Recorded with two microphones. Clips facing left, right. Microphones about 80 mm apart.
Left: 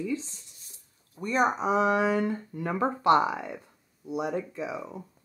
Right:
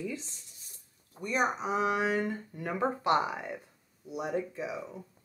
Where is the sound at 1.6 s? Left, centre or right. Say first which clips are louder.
Left 5 dB; left.